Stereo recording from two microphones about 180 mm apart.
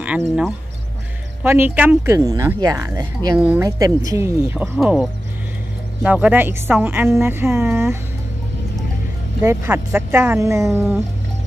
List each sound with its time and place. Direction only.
0.0 s a woman's voice: 5° right (ahead or behind)
3.6 s speech: 20° right (ahead or behind)
4.7 s a woman's voice: 5° right (ahead or behind)
9.4 s a woman's voice: 15° right (ahead or behind)